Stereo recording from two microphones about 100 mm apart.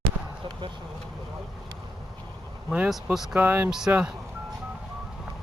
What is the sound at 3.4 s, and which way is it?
Speech, 20° right (ahead or behind).